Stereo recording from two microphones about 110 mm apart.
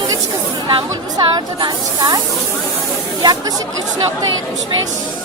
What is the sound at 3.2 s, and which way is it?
Speech, 40° right (ahead or behind).